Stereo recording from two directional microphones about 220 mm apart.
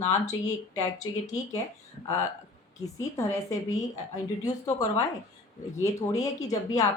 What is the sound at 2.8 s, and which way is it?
Speech, 15° left (ahead or behind).